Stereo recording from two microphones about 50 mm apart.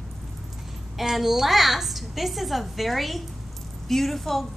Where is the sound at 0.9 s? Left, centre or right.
Centre.